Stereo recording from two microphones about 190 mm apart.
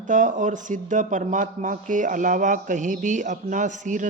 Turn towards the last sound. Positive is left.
turn(degrees=-40)  # may be behind; listen again after turning